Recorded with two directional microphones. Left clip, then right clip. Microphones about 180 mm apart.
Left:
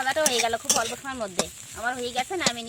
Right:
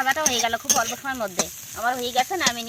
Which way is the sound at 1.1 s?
10° right (ahead or behind).